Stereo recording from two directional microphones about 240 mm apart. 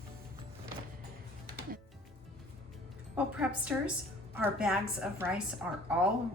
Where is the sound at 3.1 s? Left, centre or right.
Centre.